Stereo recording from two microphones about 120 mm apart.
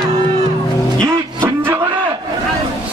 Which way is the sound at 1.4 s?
20° right (ahead or behind).